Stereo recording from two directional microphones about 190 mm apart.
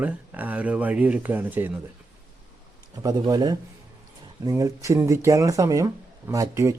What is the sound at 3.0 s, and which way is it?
Speech, 20° right (ahead or behind).